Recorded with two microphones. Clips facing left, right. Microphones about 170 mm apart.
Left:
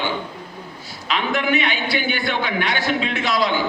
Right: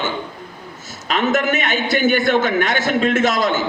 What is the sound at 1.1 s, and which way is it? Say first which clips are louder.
A man's voice: right 3 dB; 45° right (ahead or behind).